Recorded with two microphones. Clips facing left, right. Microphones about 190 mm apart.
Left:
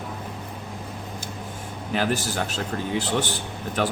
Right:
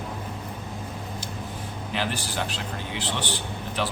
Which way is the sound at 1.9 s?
45° left (ahead or behind).